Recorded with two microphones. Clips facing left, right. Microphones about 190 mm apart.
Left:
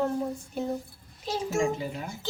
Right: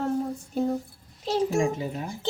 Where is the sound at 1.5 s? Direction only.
20° right (ahead or behind).